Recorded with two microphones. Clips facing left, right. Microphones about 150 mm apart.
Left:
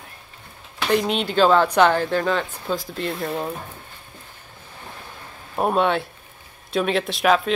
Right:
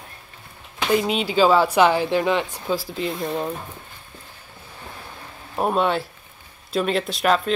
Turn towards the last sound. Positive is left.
turn(degrees=0)  # may be behind; listen again after turning